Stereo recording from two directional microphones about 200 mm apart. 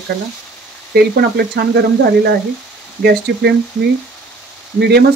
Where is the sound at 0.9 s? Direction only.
55° right (ahead or behind).